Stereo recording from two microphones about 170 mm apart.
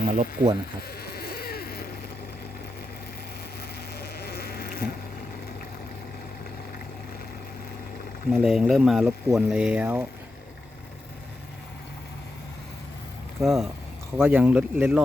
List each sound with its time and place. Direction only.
0.1 s speech: 40° right (ahead or behind)
0.8 s a sound: 65° left (ahead or behind)
3.9 s insect: 70° left (ahead or behind)
8.3 s speech: centre (ahead or behind)
13.4 s speech: centre (ahead or behind)
14.2 s speech: 10° right (ahead or behind)